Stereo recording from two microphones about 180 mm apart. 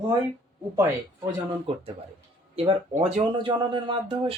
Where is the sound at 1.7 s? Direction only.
30° right (ahead or behind).